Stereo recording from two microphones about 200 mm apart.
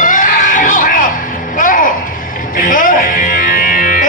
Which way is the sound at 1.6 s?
40° left (ahead or behind).